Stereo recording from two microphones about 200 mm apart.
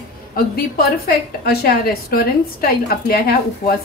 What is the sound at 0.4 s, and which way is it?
A woman's voice, 50° left (ahead or behind).